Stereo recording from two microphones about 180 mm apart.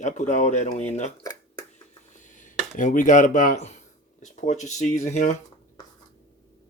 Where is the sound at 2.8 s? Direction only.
45° left (ahead or behind).